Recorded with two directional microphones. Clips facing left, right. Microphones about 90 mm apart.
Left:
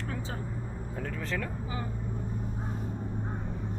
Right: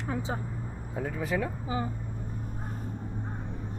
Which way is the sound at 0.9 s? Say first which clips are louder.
Right 5 dB; 10° right (ahead or behind).